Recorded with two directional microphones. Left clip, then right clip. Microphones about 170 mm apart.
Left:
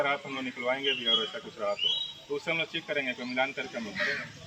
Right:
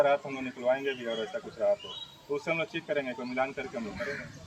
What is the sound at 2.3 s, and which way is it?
Speech, 10° right (ahead or behind).